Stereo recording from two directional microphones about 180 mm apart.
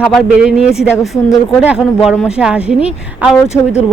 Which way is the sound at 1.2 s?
20° left (ahead or behind).